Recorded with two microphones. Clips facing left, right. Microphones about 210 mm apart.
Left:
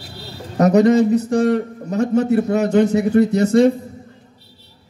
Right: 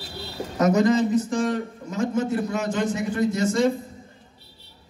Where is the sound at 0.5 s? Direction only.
65° left (ahead or behind).